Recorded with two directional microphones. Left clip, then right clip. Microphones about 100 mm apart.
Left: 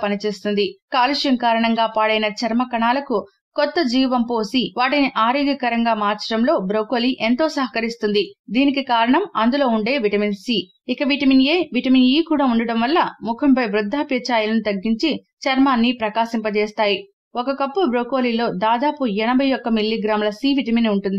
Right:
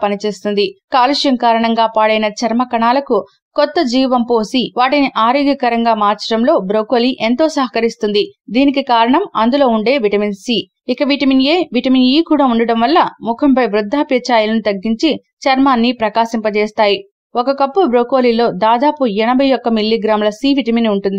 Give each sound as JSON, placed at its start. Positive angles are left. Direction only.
{"t": 0.0, "sound": "a woman's voice", "side_deg": -40}